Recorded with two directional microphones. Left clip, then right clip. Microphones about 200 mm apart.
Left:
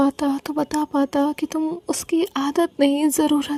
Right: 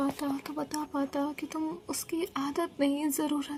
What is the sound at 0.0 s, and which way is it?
Speech, 40° left (ahead or behind).